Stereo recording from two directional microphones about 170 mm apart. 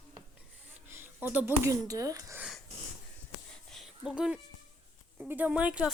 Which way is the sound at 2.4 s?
Centre (ahead or behind).